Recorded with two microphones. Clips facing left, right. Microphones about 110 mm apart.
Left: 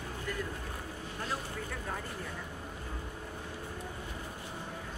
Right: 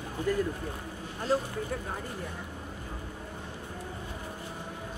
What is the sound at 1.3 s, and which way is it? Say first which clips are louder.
Speech: right 12 dB; 35° right (ahead or behind).